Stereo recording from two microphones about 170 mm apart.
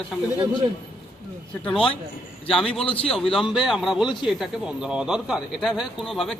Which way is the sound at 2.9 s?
35° left (ahead or behind).